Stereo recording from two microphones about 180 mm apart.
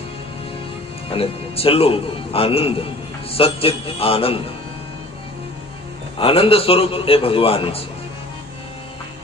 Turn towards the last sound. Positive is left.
turn(degrees=30)  # may be behind; listen again after turning